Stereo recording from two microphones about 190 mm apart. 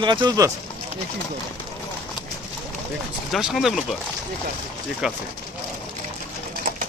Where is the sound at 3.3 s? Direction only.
Centre (ahead or behind).